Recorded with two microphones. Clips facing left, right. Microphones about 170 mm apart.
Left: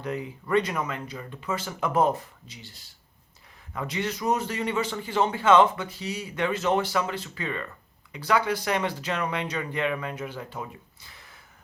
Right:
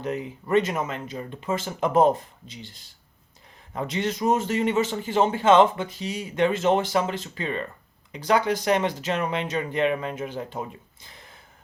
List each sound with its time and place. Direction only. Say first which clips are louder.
0.0 s speech: right 2 dB; 25° right (ahead or behind)
3.7 s speech: right 3 dB; 30° right (ahead or behind)